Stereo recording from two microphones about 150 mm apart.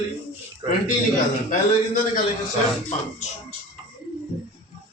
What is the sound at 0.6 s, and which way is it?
Speech, 30° right (ahead or behind).